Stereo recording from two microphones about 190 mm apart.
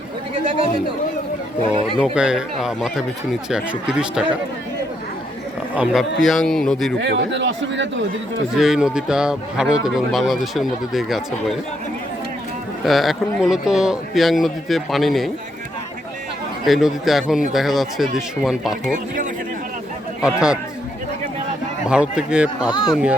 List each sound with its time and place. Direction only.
2.0 s a man's voice: 5° right (ahead or behind)
5.7 s a man's voice: 5° right (ahead or behind)
7.0 s speech: 70° right (ahead or behind)
8.5 s a man's voice: centre (ahead or behind)
12.8 s a man's voice: centre (ahead or behind)
16.6 s a man's voice: centre (ahead or behind)
20.2 s a man's voice: 5° right (ahead or behind)
21.8 s a man's voice: 5° right (ahead or behind)
22.7 s speech: 20° left (ahead or behind)